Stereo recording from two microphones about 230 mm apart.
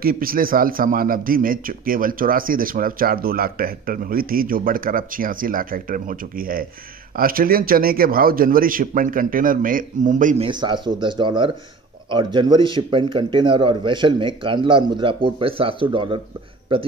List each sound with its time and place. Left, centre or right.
0.0 s a man's voice: right
10.5 s speech: centre